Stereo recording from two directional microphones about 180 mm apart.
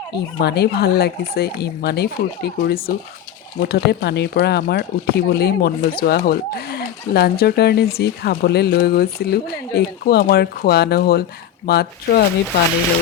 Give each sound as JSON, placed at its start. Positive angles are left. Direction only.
{"t": 0.3, "sound": "speech", "side_deg": 65}